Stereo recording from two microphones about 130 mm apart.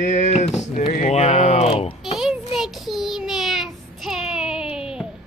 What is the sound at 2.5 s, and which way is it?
Child singing, centre (ahead or behind).